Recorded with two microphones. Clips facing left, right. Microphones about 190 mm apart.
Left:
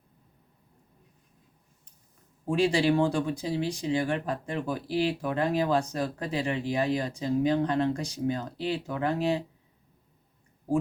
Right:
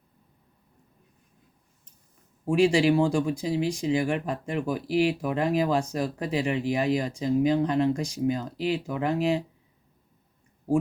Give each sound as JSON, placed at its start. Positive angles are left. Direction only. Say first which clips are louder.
{"t": 2.5, "sound": "speech", "louder": "right 3 dB", "side_deg": -15}